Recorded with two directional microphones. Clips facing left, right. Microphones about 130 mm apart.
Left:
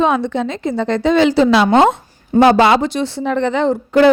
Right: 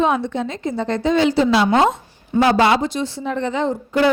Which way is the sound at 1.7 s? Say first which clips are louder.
Left 4 dB; 70° left (ahead or behind).